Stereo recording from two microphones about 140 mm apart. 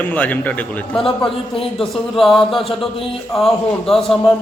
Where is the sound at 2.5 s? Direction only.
Centre (ahead or behind).